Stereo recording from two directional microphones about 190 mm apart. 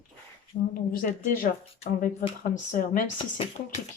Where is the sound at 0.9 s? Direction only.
45° left (ahead or behind).